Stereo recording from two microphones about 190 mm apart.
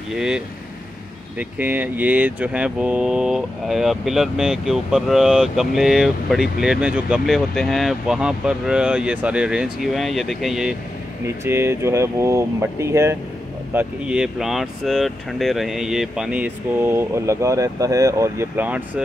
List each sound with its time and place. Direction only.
0.1 s speech: 5° right (ahead or behind)
1.6 s speech: 10° right (ahead or behind)